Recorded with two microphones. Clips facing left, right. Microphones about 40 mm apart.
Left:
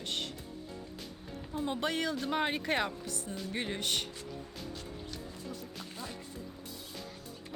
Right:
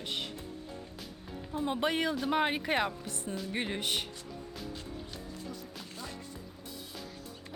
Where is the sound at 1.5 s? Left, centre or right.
Centre.